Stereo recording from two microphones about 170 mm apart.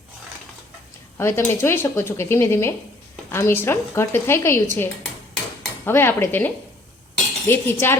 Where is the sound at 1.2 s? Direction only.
15° left (ahead or behind).